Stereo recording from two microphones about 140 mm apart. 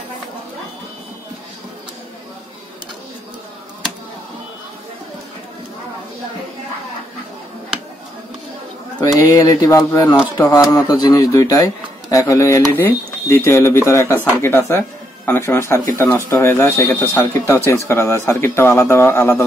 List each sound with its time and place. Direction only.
9.0 s speech: 25° left (ahead or behind)